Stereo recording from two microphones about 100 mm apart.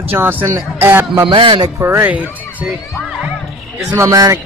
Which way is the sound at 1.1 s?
55° right (ahead or behind).